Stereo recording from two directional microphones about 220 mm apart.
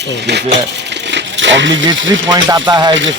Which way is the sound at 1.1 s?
55° right (ahead or behind).